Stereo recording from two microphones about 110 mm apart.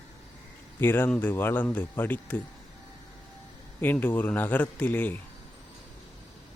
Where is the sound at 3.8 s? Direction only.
15° left (ahead or behind).